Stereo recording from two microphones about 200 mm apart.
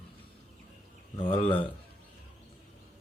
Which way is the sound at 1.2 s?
25° left (ahead or behind).